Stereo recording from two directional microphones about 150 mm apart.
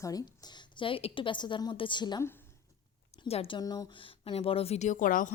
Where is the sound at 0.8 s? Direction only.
40° left (ahead or behind).